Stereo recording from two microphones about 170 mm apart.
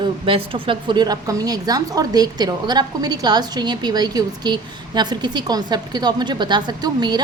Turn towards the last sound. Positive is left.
turn(degrees=-25)  # may be behind; listen again after turning